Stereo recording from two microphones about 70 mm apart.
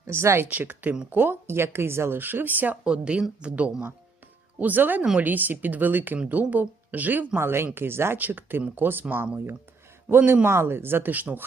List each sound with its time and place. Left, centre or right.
0.1 s a woman's voice: right
0.4 s a woman's voice: right
2.8 s speech: centre
7.3 s a woman's voice: right